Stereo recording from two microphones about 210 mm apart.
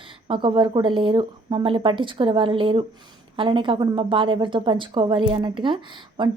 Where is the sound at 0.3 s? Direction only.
25° right (ahead or behind).